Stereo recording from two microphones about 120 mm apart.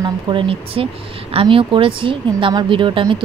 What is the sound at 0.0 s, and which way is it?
A woman's voice, 45° right (ahead or behind).